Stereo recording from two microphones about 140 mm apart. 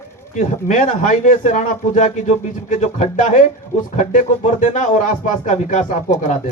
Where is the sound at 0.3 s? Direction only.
70° left (ahead or behind).